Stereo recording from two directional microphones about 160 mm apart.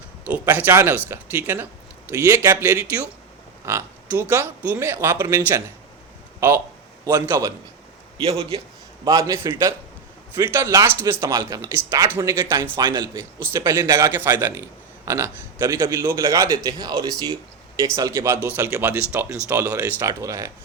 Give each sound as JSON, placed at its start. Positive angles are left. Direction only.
{"t": 0.3, "sound": "a man's voice", "side_deg": -10}
{"t": 7.0, "sound": "a man's voice", "side_deg": -15}
{"t": 8.3, "sound": "a man's voice", "side_deg": -30}